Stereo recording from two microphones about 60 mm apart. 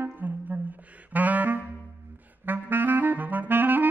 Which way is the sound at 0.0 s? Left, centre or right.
Right.